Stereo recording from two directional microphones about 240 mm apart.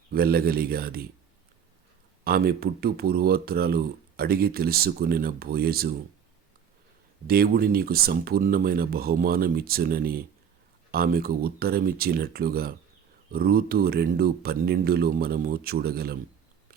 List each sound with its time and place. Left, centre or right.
0.1 s speech: right
2.2 s speech: right
7.3 s speech: right